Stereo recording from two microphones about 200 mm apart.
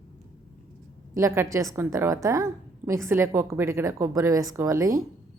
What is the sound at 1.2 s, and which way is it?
A woman's voice, 15° right (ahead or behind).